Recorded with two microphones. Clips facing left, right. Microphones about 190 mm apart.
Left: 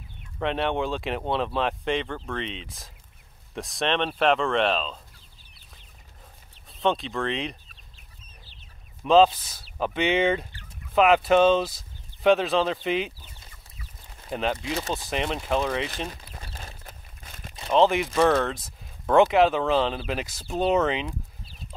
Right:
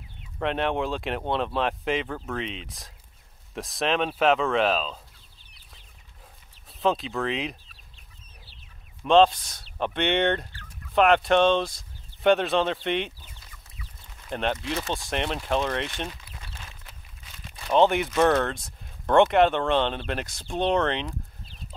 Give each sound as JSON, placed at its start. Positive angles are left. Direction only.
{"t": 0.4, "sound": "speech", "side_deg": 0}
{"t": 6.8, "sound": "speech", "side_deg": 0}
{"t": 9.0, "sound": "speech", "side_deg": 0}
{"t": 14.3, "sound": "speech", "side_deg": 0}
{"t": 16.1, "sound": "a sound", "side_deg": 40}
{"t": 17.6, "sound": "speech", "side_deg": 0}